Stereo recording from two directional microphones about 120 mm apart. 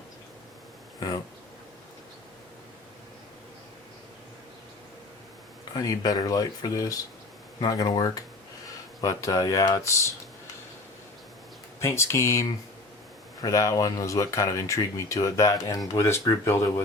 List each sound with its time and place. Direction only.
5.7 s speech: 30° left (ahead or behind)
11.8 s speech: 25° left (ahead or behind)